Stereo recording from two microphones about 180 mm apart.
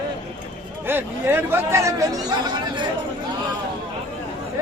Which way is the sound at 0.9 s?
10° right (ahead or behind).